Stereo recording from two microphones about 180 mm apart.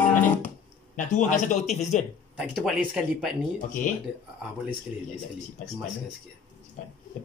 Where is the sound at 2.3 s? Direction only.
5° right (ahead or behind).